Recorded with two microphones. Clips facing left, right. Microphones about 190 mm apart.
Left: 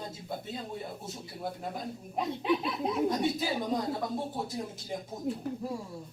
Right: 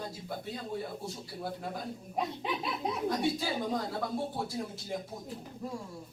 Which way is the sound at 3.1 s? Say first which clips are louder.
Left 1 dB; 20° left (ahead or behind).